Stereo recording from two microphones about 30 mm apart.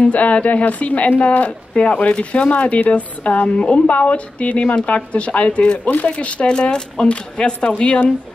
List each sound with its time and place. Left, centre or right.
0.0 s speech: left
3.4 s speech: left
3.8 s speech: left